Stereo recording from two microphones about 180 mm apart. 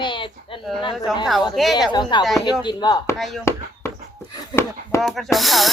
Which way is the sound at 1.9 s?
25° left (ahead or behind).